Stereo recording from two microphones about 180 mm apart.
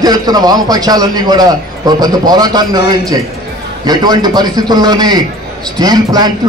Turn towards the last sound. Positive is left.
turn(degrees=-20)  # may be behind; listen again after turning